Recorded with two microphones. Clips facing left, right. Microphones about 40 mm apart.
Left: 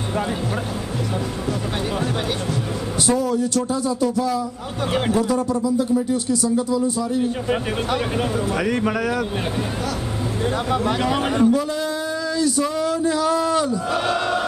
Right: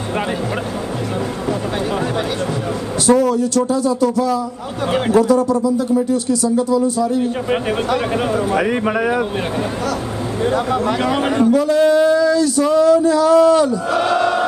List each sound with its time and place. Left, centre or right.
3.1 s speech: right
8.5 s speech: centre
11.0 s speech: centre
11.5 s speech: right
13.3 s speech: right